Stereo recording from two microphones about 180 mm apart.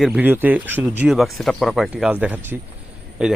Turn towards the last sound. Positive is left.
turn(degrees=-5)  # may be behind; listen again after turning